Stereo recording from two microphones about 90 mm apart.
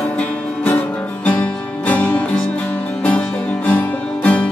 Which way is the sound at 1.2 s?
15° left (ahead or behind).